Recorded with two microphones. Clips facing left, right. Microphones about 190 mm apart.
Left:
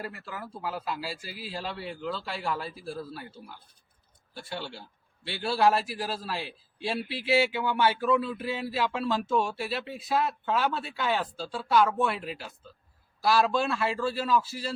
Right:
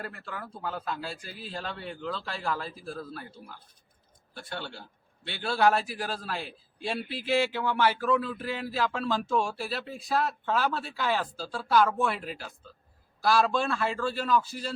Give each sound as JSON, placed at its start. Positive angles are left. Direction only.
{"t": 0.0, "sound": "a man's voice", "side_deg": 5}